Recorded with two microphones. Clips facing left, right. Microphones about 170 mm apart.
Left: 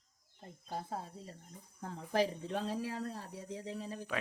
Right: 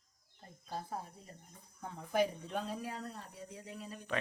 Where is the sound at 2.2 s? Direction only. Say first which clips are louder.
Even; 30° left (ahead or behind).